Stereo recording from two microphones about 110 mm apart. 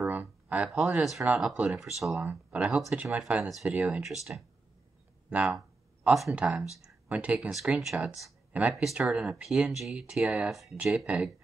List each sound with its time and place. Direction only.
0.0 s a sound: 15° right (ahead or behind)
0.7 s speech: 15° right (ahead or behind)
6.0 s speech: centre (ahead or behind)
6.3 s speech: 10° right (ahead or behind)